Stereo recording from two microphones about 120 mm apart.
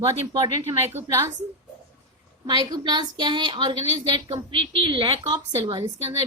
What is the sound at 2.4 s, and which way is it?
A woman's voice, 35° right (ahead or behind).